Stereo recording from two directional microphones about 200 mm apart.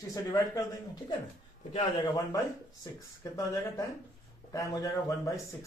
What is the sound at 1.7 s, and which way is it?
A man's voice, 25° left (ahead or behind).